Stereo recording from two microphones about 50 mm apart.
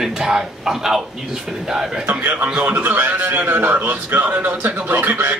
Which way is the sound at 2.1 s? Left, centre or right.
Right.